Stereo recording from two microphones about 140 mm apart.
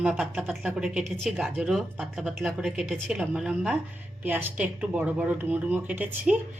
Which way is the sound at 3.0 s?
10° right (ahead or behind).